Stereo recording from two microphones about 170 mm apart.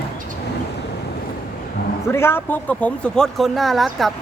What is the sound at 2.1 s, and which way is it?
Speech, 15° left (ahead or behind).